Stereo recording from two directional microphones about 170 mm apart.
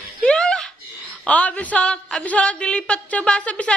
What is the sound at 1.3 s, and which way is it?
Speech, 10° left (ahead or behind).